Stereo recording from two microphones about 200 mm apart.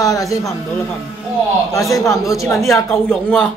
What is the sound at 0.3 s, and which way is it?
Speech, 15° left (ahead or behind).